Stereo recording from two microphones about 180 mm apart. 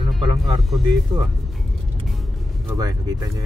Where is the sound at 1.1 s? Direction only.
20° right (ahead or behind).